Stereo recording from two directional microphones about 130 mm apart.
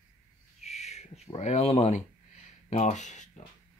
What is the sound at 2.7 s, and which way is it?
Speech, 65° left (ahead or behind).